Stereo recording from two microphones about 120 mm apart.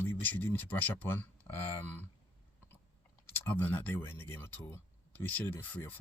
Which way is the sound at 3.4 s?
15° left (ahead or behind).